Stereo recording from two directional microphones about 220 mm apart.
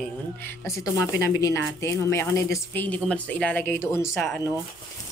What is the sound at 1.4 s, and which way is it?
A woman's voice, 15° left (ahead or behind).